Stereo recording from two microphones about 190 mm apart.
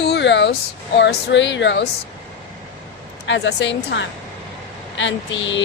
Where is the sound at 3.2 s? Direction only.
70° left (ahead or behind).